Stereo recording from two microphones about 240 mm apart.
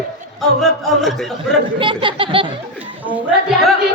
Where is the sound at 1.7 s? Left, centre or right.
Right.